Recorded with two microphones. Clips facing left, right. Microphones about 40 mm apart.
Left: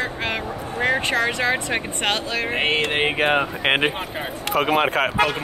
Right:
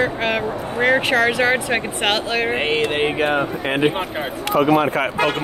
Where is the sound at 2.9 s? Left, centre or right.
Left.